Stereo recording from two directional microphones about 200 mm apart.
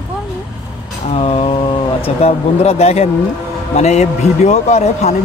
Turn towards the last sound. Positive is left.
turn(degrees=35)  # may be behind; listen again after turning